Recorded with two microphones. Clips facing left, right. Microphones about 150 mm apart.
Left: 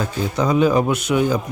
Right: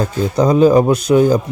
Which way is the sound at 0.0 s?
35° right (ahead or behind).